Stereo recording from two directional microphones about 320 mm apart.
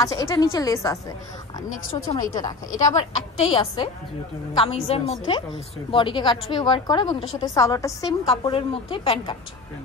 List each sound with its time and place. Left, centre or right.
0.0 s a woman's voice: centre
2.0 s a woman's voice: centre